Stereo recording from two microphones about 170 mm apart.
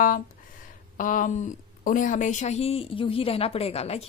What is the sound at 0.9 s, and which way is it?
A woman's voice, 50° left (ahead or behind).